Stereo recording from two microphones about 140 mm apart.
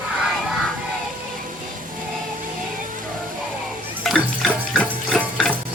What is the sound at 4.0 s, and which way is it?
Music, centre (ahead or behind).